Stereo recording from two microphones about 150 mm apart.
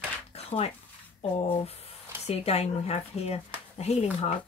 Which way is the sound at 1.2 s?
45° left (ahead or behind).